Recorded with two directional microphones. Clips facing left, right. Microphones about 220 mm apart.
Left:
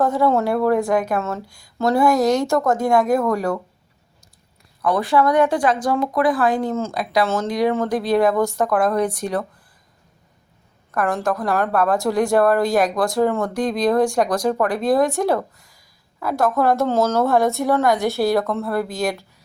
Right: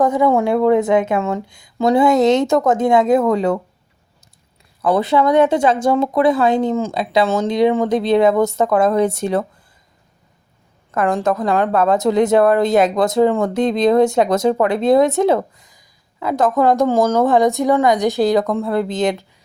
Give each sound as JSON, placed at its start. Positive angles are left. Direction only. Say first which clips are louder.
{"t": 0.0, "sound": "a woman's voice", "louder": "right 3 dB", "side_deg": -15}
{"t": 4.8, "sound": "a woman's voice", "louder": "right 3 dB", "side_deg": -25}
{"t": 10.9, "sound": "a woman's voice", "louder": "right 4 dB", "side_deg": -20}